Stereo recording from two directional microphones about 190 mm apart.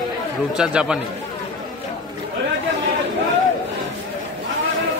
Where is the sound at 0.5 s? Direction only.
5° right (ahead or behind).